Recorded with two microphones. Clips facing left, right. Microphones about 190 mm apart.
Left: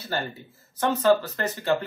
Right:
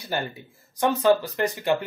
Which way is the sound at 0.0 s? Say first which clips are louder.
Right 1 dB; 15° right (ahead or behind).